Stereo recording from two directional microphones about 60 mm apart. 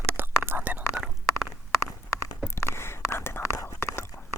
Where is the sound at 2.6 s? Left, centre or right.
Left.